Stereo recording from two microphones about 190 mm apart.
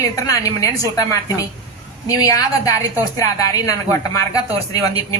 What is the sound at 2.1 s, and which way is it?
A woman's voice, 15° left (ahead or behind).